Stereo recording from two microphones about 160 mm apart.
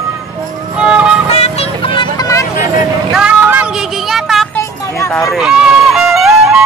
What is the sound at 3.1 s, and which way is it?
Vehicle, 5° right (ahead or behind).